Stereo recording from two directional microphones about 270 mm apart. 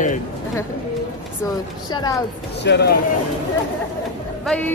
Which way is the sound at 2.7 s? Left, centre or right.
Left.